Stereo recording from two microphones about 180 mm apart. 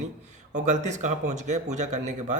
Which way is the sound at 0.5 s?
40° right (ahead or behind).